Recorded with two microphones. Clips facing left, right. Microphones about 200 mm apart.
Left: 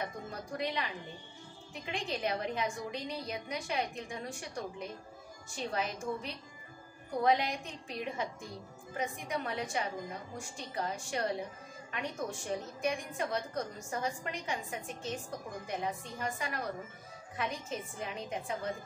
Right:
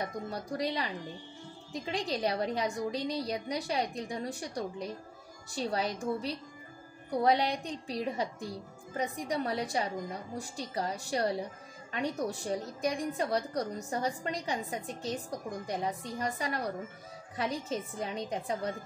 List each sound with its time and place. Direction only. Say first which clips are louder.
0.0 s a woman's voice: right 4 dB; 35° right (ahead or behind)